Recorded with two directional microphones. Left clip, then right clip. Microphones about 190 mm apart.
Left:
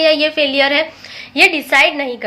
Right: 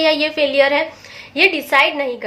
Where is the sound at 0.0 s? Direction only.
5° left (ahead or behind).